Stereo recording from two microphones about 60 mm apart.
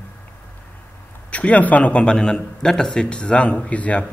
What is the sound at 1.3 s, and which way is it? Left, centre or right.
A man's voice, left.